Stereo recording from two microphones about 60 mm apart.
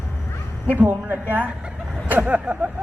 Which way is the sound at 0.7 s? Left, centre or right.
Right.